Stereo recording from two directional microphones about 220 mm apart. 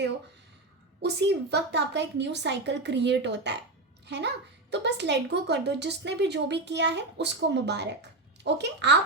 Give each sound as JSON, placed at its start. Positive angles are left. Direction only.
{"t": 1.0, "sound": "a woman's voice", "side_deg": -50}